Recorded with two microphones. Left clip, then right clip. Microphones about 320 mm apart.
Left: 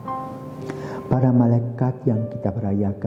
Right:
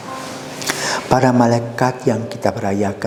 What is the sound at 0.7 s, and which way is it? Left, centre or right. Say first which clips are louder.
A man's voice: right 11 dB; centre.